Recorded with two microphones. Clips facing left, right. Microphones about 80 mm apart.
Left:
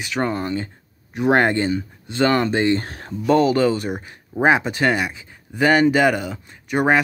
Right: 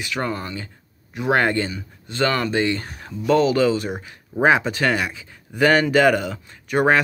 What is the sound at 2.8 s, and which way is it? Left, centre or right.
Speech, left.